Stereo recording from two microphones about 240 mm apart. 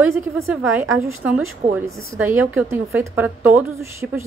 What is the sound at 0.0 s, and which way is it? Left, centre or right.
A woman's voice, centre.